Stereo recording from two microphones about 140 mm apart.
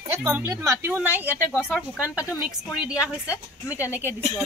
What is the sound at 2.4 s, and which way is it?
A woman's voice, 5° right (ahead or behind).